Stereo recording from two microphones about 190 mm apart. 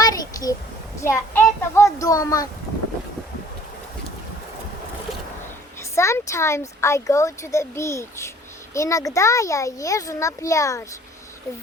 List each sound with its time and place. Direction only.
0.0 s a sound: 20° left (ahead or behind)
1.0 s speech: 15° left (ahead or behind)
5.9 s speech: 15° left (ahead or behind)